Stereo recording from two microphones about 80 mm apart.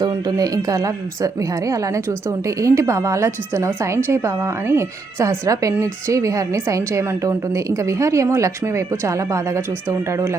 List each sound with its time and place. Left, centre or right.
0.3 s a woman's voice: right